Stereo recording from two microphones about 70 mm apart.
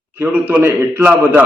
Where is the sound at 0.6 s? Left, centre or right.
Right.